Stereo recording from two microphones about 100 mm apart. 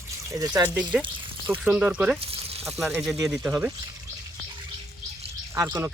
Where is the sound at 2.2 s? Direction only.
80° right.